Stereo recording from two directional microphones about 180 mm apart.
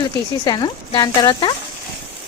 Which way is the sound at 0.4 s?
25° left (ahead or behind).